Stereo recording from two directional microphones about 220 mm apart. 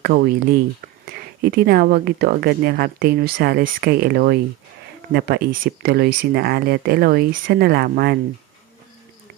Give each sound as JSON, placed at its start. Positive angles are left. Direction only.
{"t": 0.0, "sound": "speech", "side_deg": -45}